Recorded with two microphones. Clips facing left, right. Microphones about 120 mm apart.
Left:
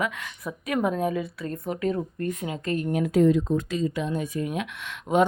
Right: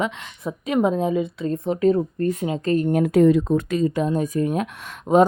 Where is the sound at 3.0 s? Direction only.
65° right (ahead or behind).